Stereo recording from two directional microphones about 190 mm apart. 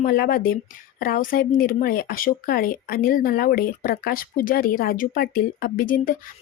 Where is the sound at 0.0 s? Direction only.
50° left (ahead or behind).